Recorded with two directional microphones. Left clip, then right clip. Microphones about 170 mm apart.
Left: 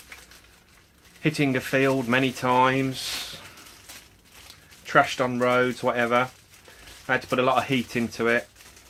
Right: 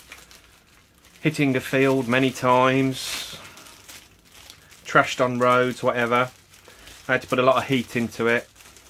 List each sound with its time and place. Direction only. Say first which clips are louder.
1.2 s speech: right 2 dB; 25° right (ahead or behind)
4.9 s speech: right 2 dB; 35° right (ahead or behind)